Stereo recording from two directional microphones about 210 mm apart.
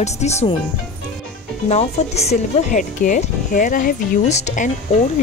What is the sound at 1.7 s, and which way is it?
Speech, 30° left (ahead or behind).